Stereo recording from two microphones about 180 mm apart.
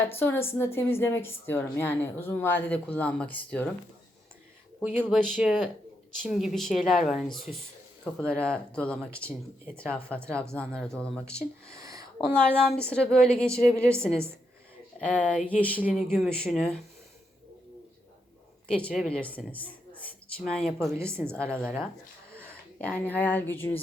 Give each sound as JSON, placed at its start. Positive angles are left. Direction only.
{"t": 0.0, "sound": "a woman's voice", "side_deg": 10}
{"t": 4.9, "sound": "a woman's voice", "side_deg": 5}
{"t": 11.7, "sound": "a sound", "side_deg": -20}
{"t": 12.3, "sound": "speech", "side_deg": 5}
{"t": 13.6, "sound": "a woman's voice", "side_deg": 35}
{"t": 13.8, "sound": "a woman's voice", "side_deg": 5}
{"t": 18.9, "sound": "speech", "side_deg": 0}
{"t": 20.9, "sound": "a woman's voice", "side_deg": -15}
{"t": 22.4, "sound": "speech", "side_deg": 10}